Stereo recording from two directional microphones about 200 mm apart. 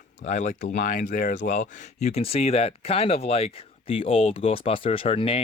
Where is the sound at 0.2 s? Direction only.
35° left (ahead or behind).